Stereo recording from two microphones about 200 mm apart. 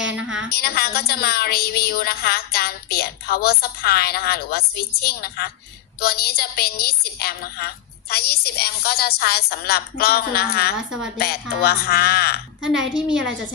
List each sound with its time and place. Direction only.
0.0 s a sound: 5° right (ahead or behind)
0.5 s a woman's voice: 50° left (ahead or behind)
12.6 s a woman's voice: 5° right (ahead or behind)